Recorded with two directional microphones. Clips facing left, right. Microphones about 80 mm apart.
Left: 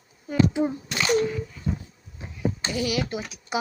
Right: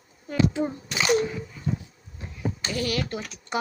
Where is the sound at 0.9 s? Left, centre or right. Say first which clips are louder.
Right 2 dB; centre.